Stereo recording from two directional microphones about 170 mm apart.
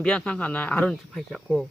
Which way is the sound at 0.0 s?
5° left (ahead or behind).